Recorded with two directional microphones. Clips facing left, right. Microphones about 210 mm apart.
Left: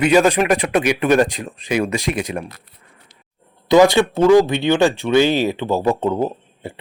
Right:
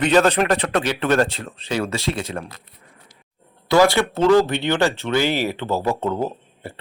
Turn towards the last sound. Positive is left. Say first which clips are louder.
# left 3 dB
turn(degrees=15)  # may be behind; listen again after turning